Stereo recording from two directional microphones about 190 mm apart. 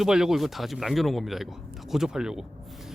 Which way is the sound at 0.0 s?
5° right (ahead or behind).